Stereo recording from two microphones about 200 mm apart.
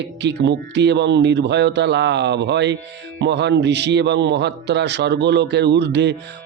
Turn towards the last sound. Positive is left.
turn(degrees=-60)  # may be behind; listen again after turning